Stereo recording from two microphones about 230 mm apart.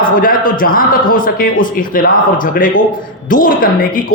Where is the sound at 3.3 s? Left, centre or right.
Left.